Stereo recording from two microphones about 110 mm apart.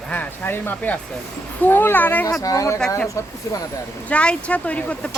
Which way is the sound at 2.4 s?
30° left (ahead or behind).